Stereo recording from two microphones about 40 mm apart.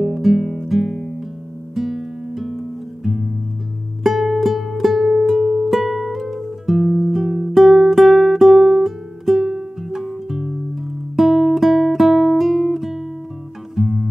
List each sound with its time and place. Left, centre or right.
0.0 s music: centre
1.8 s guitar: centre
4.0 s music: centre